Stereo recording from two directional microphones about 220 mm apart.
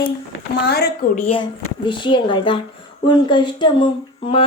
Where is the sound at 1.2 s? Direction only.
25° left (ahead or behind).